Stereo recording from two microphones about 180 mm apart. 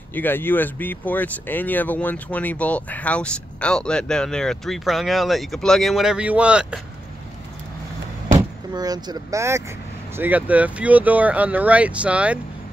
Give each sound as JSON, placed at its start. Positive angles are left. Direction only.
{"t": 0.1, "sound": "speech", "side_deg": 10}
{"t": 8.3, "sound": "speech", "side_deg": -20}